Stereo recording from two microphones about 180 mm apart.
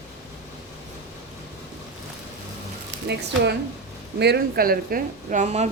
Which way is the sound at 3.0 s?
70° right (ahead or behind).